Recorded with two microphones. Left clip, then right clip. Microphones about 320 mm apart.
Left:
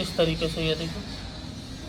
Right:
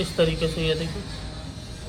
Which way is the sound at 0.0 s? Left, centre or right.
Centre.